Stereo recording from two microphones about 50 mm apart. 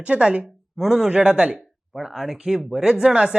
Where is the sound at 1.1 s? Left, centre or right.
Centre.